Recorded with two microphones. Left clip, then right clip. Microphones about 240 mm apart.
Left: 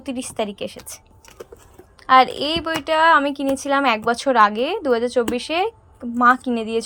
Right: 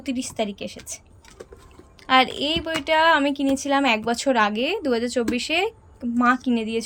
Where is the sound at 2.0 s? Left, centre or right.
Centre.